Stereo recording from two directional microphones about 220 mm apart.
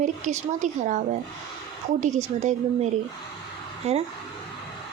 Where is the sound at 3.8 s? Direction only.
30° right (ahead or behind).